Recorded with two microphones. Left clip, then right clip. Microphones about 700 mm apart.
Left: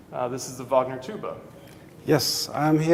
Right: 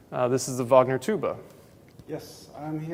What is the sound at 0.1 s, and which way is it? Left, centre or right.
Speech, right.